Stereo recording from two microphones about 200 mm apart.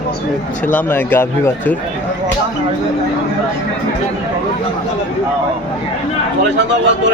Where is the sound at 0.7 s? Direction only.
10° left (ahead or behind).